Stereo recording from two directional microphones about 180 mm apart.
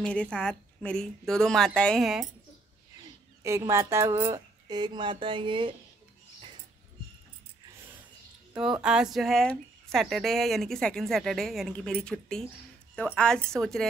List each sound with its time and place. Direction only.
0.0 s a woman's voice: 5° left (ahead or behind)
3.4 s speech: 15° right (ahead or behind)
8.5 s a woman's voice: 5° right (ahead or behind)